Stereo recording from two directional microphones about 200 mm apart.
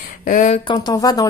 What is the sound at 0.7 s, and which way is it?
Speech, 20° left (ahead or behind).